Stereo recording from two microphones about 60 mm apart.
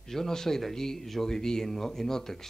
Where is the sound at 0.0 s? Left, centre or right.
Centre.